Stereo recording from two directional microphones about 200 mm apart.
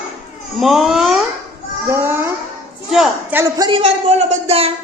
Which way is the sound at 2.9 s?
Centre (ahead or behind).